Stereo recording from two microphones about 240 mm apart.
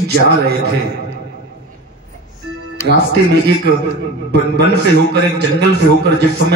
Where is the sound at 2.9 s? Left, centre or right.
Right.